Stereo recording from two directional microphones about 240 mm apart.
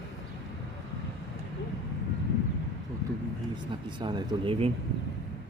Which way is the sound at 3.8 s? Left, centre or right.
Centre.